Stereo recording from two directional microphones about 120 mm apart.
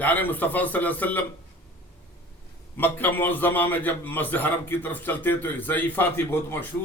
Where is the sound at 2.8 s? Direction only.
15° left (ahead or behind).